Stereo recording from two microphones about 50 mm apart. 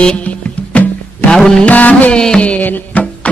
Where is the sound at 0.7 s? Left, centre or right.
Left.